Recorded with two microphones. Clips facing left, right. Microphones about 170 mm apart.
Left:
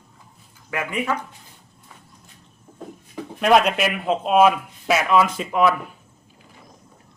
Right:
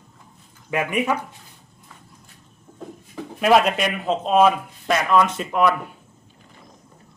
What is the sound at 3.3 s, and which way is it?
Speech, centre (ahead or behind).